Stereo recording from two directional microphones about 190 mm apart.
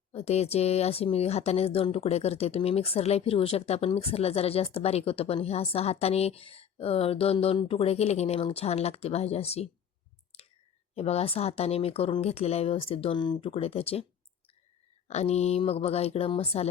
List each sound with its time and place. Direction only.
0.1 s speech: 30° left (ahead or behind)
10.3 s clicking: 30° left (ahead or behind)
10.9 s speech: 35° left (ahead or behind)
15.0 s speech: 35° left (ahead or behind)